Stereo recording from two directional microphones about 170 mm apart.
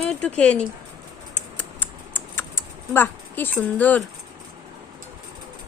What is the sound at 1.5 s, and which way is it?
Typing, 10° left (ahead or behind).